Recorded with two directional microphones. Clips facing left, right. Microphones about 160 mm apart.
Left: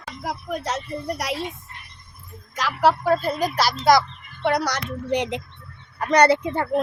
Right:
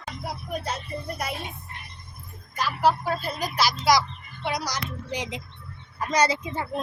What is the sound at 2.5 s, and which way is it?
A child's voice, 90° left.